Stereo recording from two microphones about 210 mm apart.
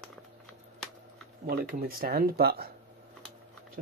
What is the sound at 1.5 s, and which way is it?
Speech, 45° right (ahead or behind).